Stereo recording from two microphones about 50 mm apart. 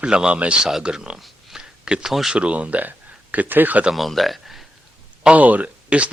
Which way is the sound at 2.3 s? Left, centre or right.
Right.